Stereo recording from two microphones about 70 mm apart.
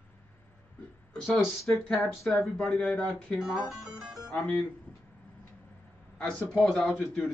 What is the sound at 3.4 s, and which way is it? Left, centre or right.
Speech, centre.